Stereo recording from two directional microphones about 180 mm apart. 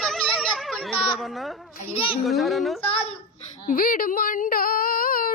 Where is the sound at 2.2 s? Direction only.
Centre (ahead or behind).